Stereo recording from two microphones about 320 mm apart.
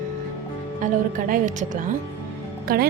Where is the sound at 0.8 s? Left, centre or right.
Right.